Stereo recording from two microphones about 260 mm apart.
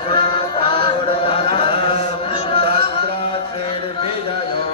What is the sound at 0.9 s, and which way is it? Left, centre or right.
Chant, left.